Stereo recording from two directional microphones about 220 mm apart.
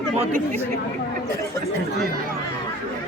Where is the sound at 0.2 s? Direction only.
30° right (ahead or behind).